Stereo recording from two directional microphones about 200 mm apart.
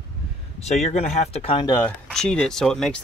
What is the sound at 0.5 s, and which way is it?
Speech, 35° left (ahead or behind).